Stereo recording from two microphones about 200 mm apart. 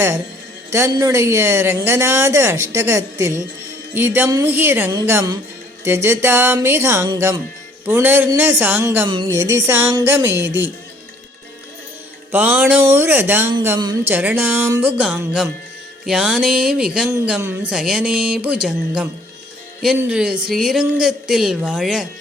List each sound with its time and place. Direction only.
0.7 s a woman's voice: 15° right (ahead or behind)
12.3 s a woman's voice: 10° right (ahead or behind)
13.7 s a woman's voice: 20° right (ahead or behind)
14.1 s a woman's voice: 10° right (ahead or behind)